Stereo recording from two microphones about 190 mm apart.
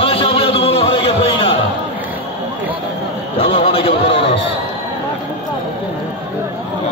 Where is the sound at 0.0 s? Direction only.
30° left (ahead or behind).